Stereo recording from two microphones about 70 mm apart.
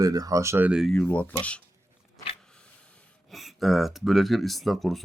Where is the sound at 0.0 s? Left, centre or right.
Right.